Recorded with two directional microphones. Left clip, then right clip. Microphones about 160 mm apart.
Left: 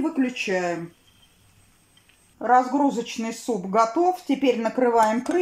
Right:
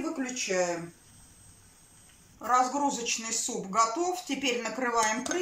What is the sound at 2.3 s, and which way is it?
Speech, 40° left (ahead or behind).